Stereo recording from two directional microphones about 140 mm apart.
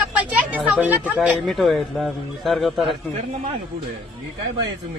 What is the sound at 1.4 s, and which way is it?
A man's voice, centre (ahead or behind).